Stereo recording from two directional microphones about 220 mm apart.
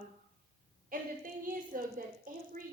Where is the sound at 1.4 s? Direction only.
40° right (ahead or behind).